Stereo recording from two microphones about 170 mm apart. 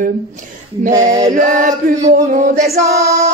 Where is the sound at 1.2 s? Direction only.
50° right (ahead or behind).